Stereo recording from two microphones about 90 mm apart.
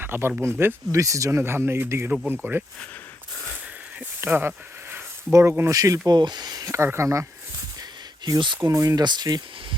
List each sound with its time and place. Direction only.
0.0 s speech: 25° right (ahead or behind)
0.9 s speech: 35° right (ahead or behind)
4.2 s a sound: 20° right (ahead or behind)
5.3 s speech: 30° right (ahead or behind)
5.7 s speech: 40° right (ahead or behind)
6.1 s speech: 55° right (ahead or behind)
6.7 s speech: 30° right (ahead or behind)
8.2 s speech: 55° right (ahead or behind)
8.6 s speech: 35° right (ahead or behind)
9.0 s speech: 50° right (ahead or behind)